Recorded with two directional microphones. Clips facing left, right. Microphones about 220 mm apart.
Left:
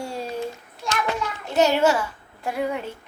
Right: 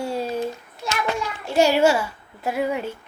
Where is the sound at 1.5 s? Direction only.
10° right (ahead or behind).